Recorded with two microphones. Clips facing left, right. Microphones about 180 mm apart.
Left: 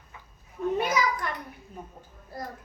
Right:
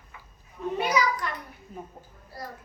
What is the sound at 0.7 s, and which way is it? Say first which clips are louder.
Speech: right 3 dB; 50° left (ahead or behind).